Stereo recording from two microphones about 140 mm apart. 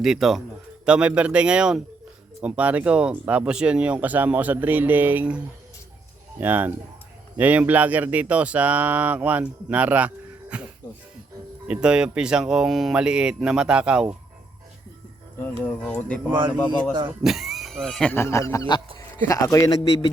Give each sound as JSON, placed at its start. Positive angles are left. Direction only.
{"t": 0.0, "sound": "speech", "side_deg": 0}
{"t": 6.4, "sound": "speech", "side_deg": -15}
{"t": 11.7, "sound": "speech", "side_deg": -5}
{"t": 15.4, "sound": "speech", "side_deg": 10}
{"t": 17.2, "sound": "speech", "side_deg": 0}
{"t": 18.1, "sound": "a man's voice", "side_deg": 20}